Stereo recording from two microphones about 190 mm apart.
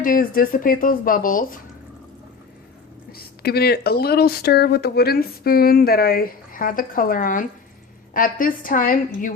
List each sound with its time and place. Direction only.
0.0 s speech: 50° left (ahead or behind)
3.1 s speech: 55° left (ahead or behind)